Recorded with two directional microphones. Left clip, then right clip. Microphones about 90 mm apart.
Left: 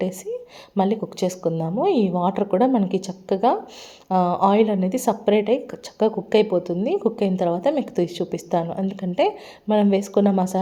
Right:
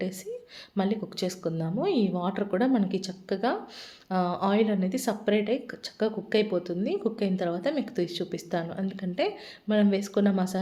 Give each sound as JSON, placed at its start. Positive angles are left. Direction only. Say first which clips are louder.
{"t": 0.8, "sound": "a woman's voice", "louder": "left 8 dB", "side_deg": 30}